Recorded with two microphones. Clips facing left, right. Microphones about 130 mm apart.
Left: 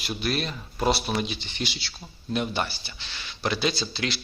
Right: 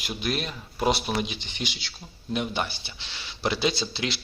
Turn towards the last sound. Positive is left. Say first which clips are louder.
# even
turn(degrees=-20)  # may be behind; listen again after turning